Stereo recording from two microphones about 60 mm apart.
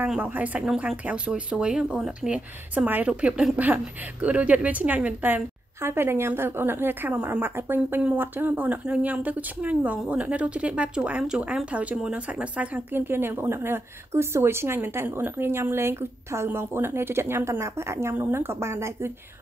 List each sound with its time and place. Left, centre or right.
0.2 s speech: right
5.8 s a woman's voice: right
11.3 s speech: centre
11.7 s speech: right
12.9 s a woman's voice: right